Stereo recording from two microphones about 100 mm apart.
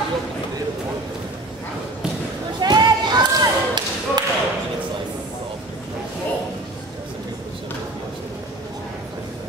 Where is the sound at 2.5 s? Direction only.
45° right (ahead or behind).